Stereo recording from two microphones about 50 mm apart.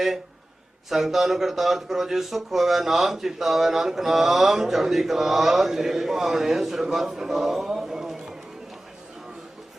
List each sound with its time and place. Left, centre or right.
0.9 s a man's voice: centre